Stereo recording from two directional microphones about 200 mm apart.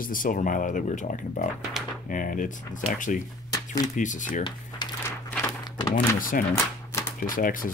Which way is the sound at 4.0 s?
40° left (ahead or behind).